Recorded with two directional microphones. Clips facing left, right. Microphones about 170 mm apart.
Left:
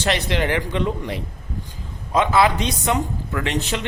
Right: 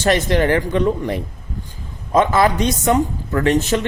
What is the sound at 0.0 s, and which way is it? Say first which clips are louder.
A man's voice: right 6 dB; 45° right (ahead or behind).